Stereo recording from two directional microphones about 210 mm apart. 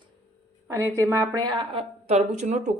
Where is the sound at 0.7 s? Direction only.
15° right (ahead or behind).